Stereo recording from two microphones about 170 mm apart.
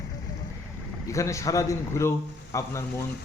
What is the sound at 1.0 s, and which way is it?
A man's voice, 20° left (ahead or behind).